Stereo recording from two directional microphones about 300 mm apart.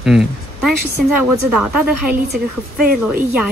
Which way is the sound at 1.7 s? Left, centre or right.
Centre.